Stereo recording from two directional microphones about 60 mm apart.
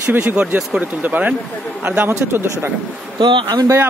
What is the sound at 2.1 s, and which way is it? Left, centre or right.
Speech, right.